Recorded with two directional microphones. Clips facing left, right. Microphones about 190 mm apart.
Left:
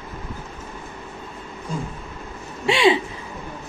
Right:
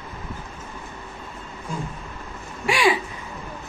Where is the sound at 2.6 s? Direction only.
25° left (ahead or behind).